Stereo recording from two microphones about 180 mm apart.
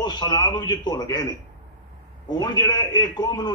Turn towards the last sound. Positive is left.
turn(degrees=25)  # may be behind; listen again after turning